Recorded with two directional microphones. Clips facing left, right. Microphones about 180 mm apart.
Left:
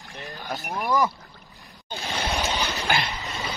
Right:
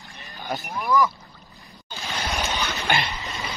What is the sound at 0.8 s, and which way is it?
Speech, 40° left (ahead or behind).